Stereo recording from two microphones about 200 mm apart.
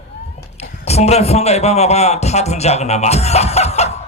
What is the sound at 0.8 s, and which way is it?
A man's voice, 30° left (ahead or behind).